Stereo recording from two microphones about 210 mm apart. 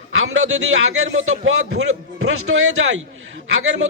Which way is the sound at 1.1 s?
70° right (ahead or behind).